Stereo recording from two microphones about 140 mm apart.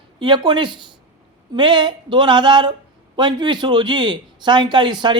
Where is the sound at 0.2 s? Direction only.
35° right (ahead or behind).